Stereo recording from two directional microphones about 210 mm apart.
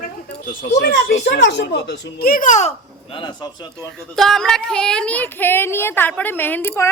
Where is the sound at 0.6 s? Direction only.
45° left (ahead or behind).